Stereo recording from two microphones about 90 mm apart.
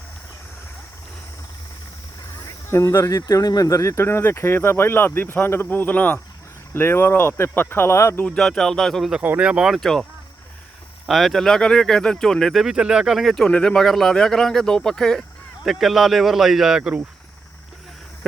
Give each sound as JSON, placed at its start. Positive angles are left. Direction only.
{"t": 2.6, "sound": "speech", "side_deg": 30}
{"t": 8.4, "sound": "speech", "side_deg": 5}
{"t": 9.2, "sound": "speech", "side_deg": -15}